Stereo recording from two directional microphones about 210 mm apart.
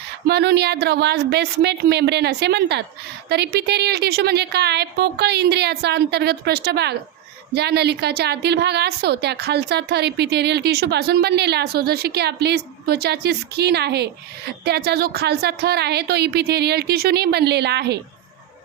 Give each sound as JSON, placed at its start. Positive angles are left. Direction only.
{"t": 0.3, "sound": "a woman's voice", "side_deg": -50}